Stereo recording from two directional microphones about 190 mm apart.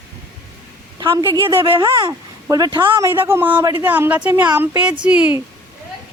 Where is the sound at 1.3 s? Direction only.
25° right (ahead or behind); by 5.4 s 5° right (ahead or behind).